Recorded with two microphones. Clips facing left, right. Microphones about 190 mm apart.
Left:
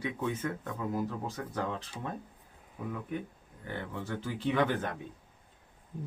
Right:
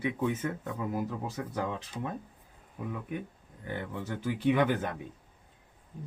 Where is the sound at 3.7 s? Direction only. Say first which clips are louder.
Right 1 dB; 15° right (ahead or behind).